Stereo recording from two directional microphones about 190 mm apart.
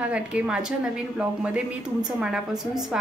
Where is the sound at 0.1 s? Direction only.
5° right (ahead or behind).